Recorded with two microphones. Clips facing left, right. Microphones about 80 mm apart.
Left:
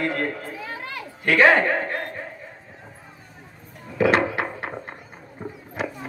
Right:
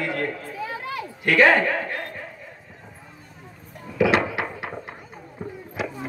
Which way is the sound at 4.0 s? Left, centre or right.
Left.